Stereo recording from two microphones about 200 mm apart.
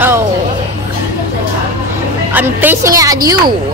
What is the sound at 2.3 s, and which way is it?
Speech, 10° right (ahead or behind).